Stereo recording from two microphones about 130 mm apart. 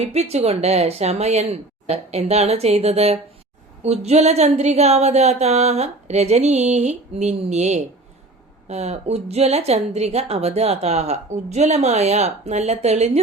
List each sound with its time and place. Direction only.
0.0 s a woman's voice: 55° right (ahead or behind)